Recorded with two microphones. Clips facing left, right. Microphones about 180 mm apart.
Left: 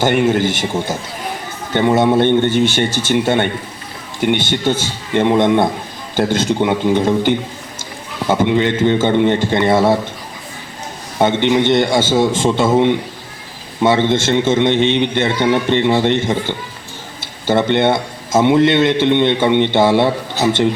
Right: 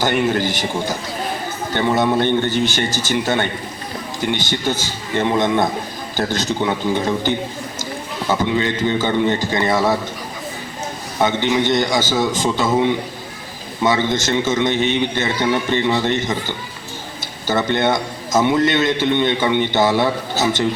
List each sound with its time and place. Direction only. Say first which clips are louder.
0.3 s a man's voice: left 4 dB; 25° left (ahead or behind)
8.3 s a man's voice: left 5 dB; 25° left (ahead or behind)
11.2 s a man's voice: left 4 dB; 25° left (ahead or behind)